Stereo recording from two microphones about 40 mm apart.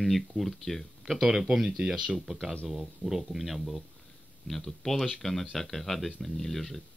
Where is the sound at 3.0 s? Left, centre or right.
Centre.